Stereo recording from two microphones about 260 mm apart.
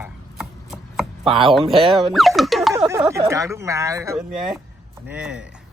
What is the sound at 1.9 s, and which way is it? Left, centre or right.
Music, centre.